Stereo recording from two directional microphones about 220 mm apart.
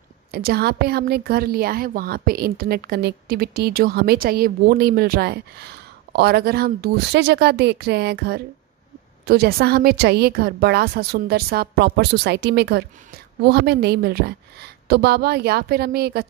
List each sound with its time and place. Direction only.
0.3 s a woman's voice: 45° right (ahead or behind)